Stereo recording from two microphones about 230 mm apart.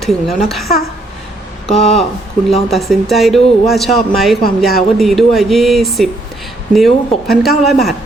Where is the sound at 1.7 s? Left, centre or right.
Left.